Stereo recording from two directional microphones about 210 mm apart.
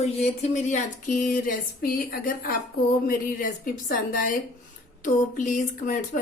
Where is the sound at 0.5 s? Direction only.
35° left (ahead or behind).